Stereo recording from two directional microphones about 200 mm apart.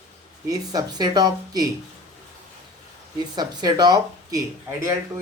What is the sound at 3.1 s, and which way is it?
Speech, 20° right (ahead or behind).